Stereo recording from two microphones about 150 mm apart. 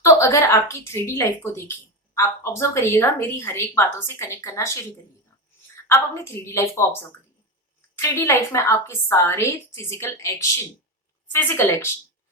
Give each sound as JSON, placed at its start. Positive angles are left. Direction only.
{"t": 0.0, "sound": "speech", "side_deg": 20}
{"t": 5.9, "sound": "a woman's voice", "side_deg": 15}